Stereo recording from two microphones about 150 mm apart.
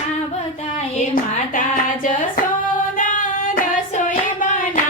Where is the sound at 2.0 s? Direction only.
65° left (ahead or behind).